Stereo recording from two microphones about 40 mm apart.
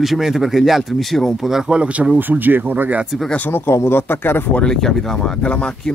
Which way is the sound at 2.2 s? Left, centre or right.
Right.